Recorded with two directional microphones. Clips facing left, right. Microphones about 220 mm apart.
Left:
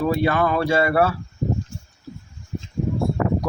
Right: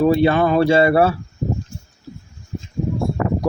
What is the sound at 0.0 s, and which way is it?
Speech, 25° right (ahead or behind).